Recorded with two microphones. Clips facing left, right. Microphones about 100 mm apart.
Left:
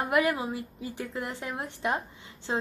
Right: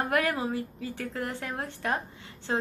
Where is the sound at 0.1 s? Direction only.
20° left (ahead or behind).